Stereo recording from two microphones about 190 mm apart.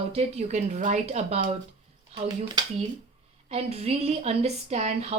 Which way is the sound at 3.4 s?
35° right (ahead or behind).